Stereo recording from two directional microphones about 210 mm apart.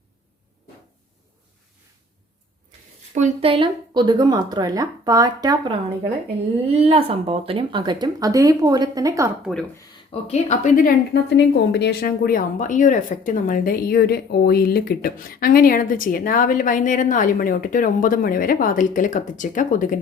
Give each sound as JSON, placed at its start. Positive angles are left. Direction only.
{"t": 3.2, "sound": "speech", "side_deg": -30}
{"t": 6.7, "sound": "speech", "side_deg": -30}
{"t": 10.1, "sound": "a woman's voice", "side_deg": 30}